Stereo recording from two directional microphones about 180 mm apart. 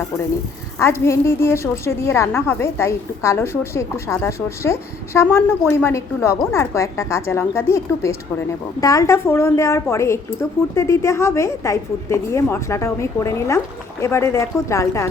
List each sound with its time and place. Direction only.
0.8 s a woman's voice: 15° left (ahead or behind)